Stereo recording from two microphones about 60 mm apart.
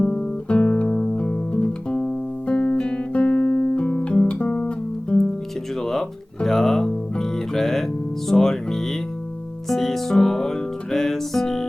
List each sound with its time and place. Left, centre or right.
0.0 s guitar: centre
5.8 s music: centre